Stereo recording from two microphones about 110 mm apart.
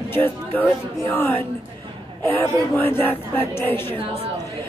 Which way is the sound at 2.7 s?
15° left (ahead or behind).